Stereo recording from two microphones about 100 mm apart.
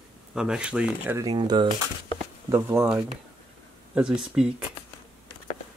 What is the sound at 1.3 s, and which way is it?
Speech, 50° right (ahead or behind).